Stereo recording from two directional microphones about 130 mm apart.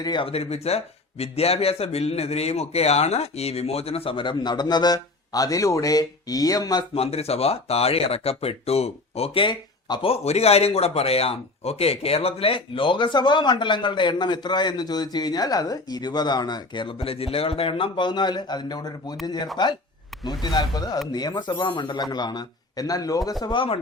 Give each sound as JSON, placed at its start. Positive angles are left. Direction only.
{"t": 0.0, "sound": "a man's voice", "side_deg": 35}
{"t": 6.9, "sound": "speech", "side_deg": 50}